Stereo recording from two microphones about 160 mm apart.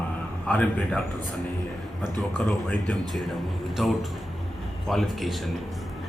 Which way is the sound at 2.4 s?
5° left (ahead or behind).